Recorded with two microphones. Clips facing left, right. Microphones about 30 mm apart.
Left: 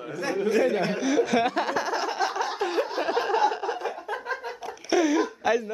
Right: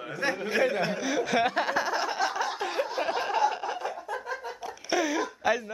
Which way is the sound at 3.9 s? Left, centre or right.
Left.